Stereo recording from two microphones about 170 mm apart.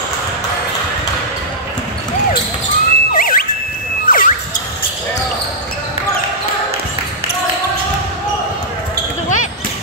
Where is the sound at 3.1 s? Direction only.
55° left (ahead or behind).